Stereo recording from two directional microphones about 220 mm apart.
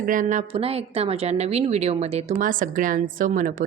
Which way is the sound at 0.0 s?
35° right (ahead or behind).